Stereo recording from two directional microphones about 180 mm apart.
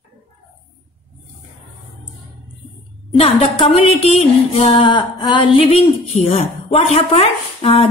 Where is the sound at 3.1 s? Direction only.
30° left (ahead or behind).